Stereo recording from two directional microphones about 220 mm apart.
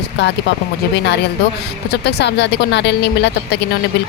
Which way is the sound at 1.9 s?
50° left (ahead or behind).